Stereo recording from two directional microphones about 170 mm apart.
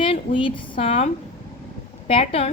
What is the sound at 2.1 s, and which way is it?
Speech, 35° left (ahead or behind).